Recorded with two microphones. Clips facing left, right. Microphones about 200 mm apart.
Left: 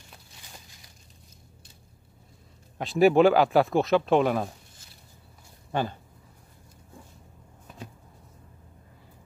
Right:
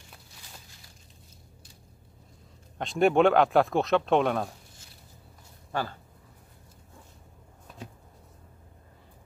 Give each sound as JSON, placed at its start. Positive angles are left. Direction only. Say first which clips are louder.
{"t": 2.8, "sound": "speech", "louder": "left 3 dB", "side_deg": 5}
{"t": 5.7, "sound": "speech", "louder": "left 3 dB", "side_deg": 20}